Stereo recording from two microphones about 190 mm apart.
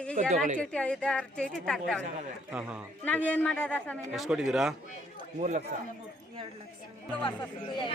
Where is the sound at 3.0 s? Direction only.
10° left (ahead or behind).